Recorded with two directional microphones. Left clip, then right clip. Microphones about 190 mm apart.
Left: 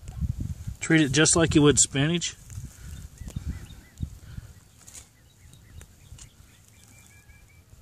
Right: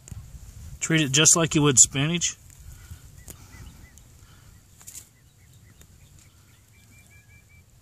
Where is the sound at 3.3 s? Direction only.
25° right (ahead or behind).